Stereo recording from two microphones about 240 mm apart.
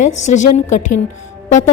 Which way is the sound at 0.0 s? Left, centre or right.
Left.